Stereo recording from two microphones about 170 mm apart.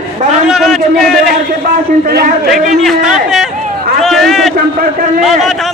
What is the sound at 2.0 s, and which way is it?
Speech, 65° right (ahead or behind).